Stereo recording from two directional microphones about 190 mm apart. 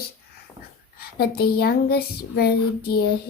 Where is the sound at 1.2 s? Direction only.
55° left (ahead or behind).